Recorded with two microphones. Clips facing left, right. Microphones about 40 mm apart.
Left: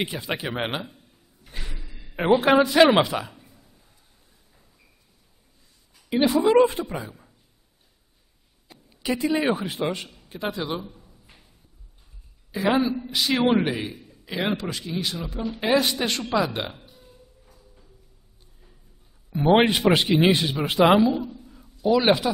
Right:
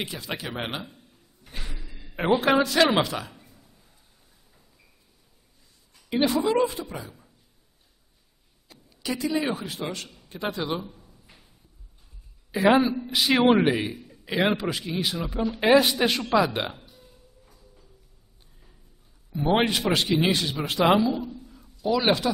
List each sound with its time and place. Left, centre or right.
0.0 s speech: left
0.9 s a sound: centre
2.4 s speech: centre
3.3 s a sound: centre
5.9 s a woman's voice: centre
6.6 s a woman's voice: left
6.9 s a woman's voice: left
8.6 s speech: left
10.0 s a sound: centre
12.4 s a woman's voice: centre
16.8 s a sound: centre
19.5 s speech: centre